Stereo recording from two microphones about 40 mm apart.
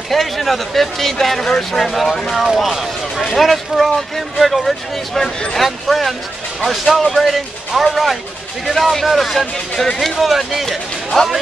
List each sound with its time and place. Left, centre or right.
0.1 s speech: centre
5.2 s speech: centre
5.6 s speech: centre